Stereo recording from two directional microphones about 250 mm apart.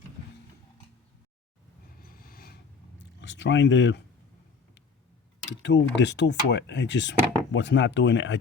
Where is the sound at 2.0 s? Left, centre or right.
Left.